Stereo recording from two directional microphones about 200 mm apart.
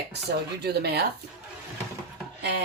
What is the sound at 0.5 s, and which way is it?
Speech, 55° right (ahead or behind).